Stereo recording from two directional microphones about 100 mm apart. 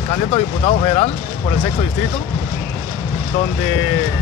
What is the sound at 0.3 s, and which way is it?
Speech, 80° left.